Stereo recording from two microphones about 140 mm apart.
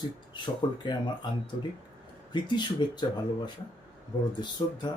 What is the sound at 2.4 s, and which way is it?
Speech, 30° left (ahead or behind).